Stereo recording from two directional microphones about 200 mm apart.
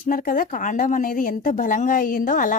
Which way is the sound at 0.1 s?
45° left (ahead or behind).